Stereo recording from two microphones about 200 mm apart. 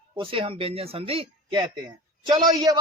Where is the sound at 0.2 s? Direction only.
25° right (ahead or behind).